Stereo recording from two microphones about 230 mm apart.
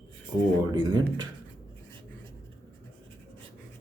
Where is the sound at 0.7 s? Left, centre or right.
Centre.